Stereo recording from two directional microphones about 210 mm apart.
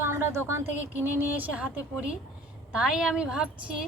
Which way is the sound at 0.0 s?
10° right (ahead or behind).